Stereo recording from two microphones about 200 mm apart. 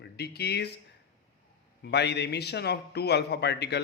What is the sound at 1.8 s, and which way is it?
A man's voice, 55° left (ahead or behind).